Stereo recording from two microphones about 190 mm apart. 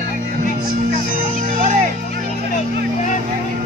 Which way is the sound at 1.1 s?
40° right (ahead or behind).